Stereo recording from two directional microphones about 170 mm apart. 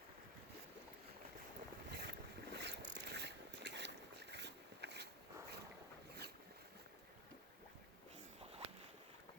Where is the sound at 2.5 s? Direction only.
90° right.